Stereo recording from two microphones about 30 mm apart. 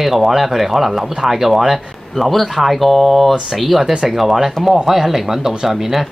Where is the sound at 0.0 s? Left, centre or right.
Centre.